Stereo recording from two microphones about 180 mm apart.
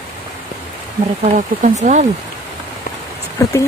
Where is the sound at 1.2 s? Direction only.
40° right (ahead or behind).